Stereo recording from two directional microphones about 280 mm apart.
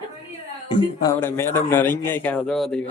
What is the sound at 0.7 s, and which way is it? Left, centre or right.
A man's voice, centre.